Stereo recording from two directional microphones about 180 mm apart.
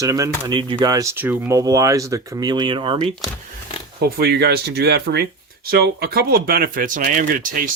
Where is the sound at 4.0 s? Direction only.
65° right (ahead or behind).